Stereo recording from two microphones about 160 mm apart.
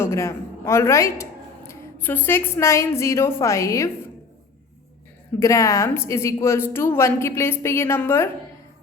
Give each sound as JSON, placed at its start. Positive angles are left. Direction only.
{"t": 0.0, "sound": "speech", "side_deg": 15}
{"t": 5.4, "sound": "a woman's voice", "side_deg": 20}